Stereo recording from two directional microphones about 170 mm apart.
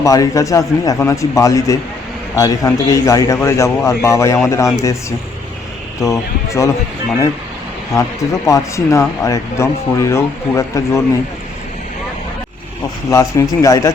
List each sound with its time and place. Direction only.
0.0 s speech: 20° left (ahead or behind)
6.0 s speech: 15° left (ahead or behind)
8.4 s speech: 20° left (ahead or behind)
13.1 s speech: 20° left (ahead or behind)